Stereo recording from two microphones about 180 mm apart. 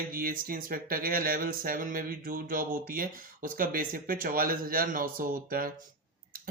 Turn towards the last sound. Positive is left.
turn(degrees=-55)  # may be behind; listen again after turning